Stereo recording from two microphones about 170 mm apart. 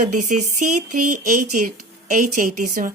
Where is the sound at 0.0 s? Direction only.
50° right (ahead or behind).